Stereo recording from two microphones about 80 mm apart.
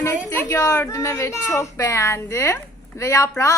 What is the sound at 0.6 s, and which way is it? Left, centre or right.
Speech, left.